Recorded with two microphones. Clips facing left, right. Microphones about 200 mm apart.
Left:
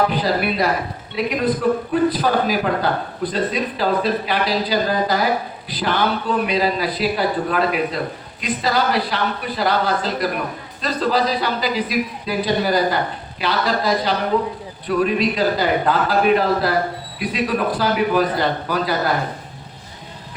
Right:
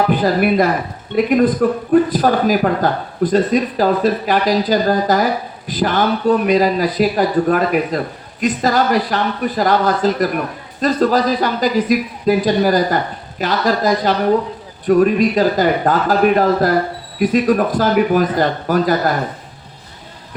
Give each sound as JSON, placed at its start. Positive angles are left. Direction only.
{"t": 0.1, "sound": "speech", "side_deg": -50}